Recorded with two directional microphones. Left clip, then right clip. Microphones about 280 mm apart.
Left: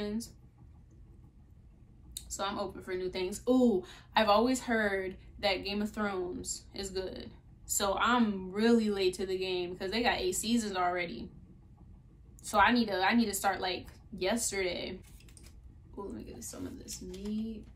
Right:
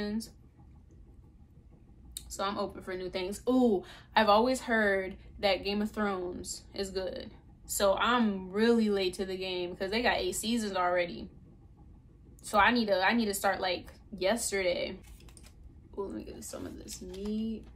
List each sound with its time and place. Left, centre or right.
0.0 s speech: centre
2.1 s speech: centre
12.4 s speech: centre
16.0 s speech: centre